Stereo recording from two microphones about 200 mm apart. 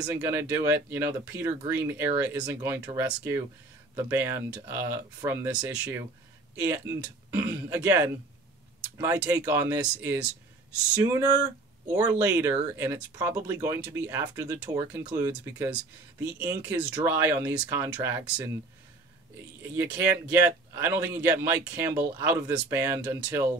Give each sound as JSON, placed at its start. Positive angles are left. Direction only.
{"t": 0.0, "sound": "speech", "side_deg": -15}
{"t": 19.7, "sound": "speech", "side_deg": -10}